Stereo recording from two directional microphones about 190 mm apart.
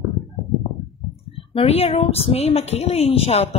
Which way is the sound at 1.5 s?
30° left (ahead or behind).